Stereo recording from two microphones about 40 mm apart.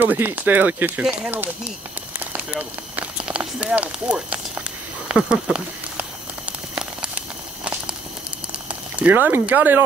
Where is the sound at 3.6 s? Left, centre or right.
Right.